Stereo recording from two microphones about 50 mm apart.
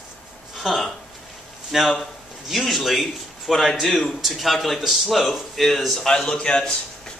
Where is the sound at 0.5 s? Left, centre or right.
Centre.